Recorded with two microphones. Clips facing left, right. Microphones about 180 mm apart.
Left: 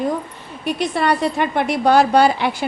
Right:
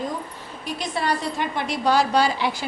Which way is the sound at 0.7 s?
65° left (ahead or behind).